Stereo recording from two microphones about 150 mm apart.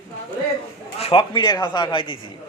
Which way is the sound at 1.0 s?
35° left (ahead or behind).